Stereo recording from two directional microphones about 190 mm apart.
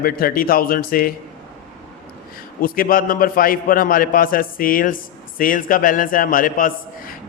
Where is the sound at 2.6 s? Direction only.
50° left (ahead or behind).